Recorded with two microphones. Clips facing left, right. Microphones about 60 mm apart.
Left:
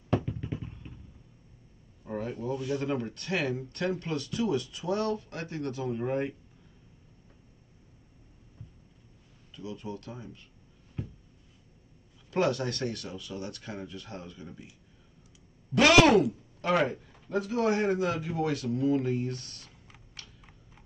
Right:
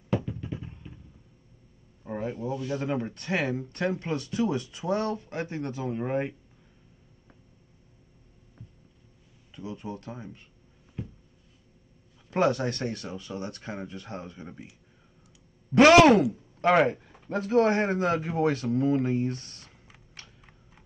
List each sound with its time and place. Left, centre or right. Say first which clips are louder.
2.0 s a sound: right 2 dB; right
2.6 s speech: right 1 dB; centre
9.5 s speech: right 2 dB; right
12.3 s speech: right 3 dB; right
15.7 s a man's voice: right 4 dB; right
20.2 s typing: right 1 dB; right